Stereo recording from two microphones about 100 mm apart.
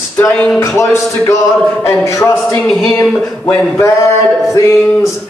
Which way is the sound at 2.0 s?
30° left (ahead or behind).